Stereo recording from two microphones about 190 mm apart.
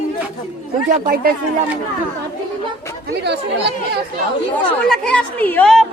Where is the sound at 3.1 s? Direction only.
60° right (ahead or behind).